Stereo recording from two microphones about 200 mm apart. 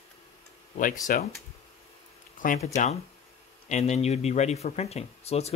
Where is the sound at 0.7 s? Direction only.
40° left (ahead or behind).